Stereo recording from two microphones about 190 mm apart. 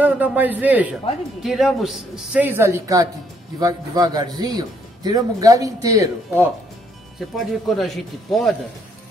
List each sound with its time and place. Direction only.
0.0 s speech: 10° right (ahead or behind)
7.3 s a man's voice: centre (ahead or behind)